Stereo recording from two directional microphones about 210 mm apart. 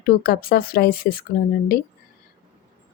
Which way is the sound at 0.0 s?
45° left (ahead or behind).